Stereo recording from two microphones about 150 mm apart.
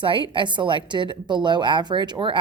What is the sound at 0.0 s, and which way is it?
A woman's voice, 35° right (ahead or behind).